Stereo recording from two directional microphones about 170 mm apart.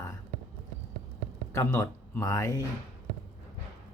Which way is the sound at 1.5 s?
15° left (ahead or behind).